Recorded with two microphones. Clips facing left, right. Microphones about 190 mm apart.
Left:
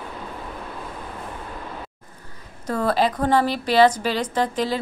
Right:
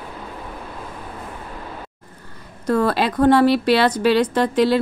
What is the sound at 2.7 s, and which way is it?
A woman's voice, 70° right (ahead or behind).